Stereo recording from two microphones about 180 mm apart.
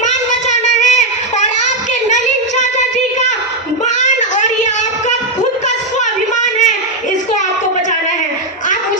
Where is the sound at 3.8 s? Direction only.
45° left (ahead or behind).